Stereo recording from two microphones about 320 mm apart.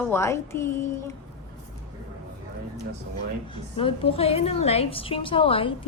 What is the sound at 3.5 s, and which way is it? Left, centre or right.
A woman's voice, centre.